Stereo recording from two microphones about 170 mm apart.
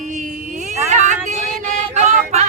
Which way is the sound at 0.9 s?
45° right (ahead or behind).